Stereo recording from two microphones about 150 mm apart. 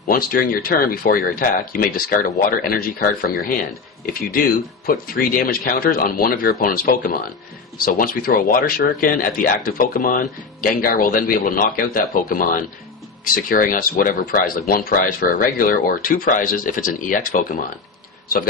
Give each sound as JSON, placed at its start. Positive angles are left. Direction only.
{"t": 0.1, "sound": "speech", "side_deg": 75}
{"t": 4.0, "sound": "speech", "side_deg": 70}